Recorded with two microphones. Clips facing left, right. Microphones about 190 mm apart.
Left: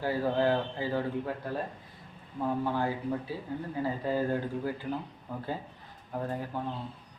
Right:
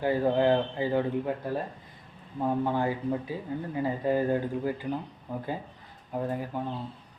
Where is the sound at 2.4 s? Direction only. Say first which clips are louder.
Right 3 dB; 15° right (ahead or behind).